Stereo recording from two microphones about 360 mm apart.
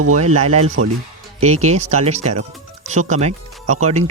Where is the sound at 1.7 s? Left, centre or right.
Centre.